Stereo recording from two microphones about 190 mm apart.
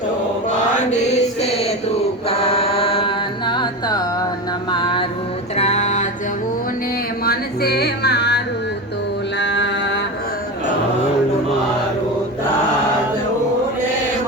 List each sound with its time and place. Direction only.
0.9 s chant: 35° left (ahead or behind)
2.2 s music: 30° left (ahead or behind)
5.5 s music: 35° left (ahead or behind)
7.3 s music: 55° left (ahead or behind)
9.4 s mantra: 70° left (ahead or behind)